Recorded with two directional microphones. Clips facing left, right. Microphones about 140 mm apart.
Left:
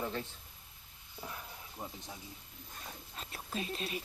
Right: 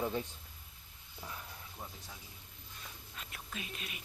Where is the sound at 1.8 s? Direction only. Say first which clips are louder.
Left 4 dB; 15° left (ahead or behind).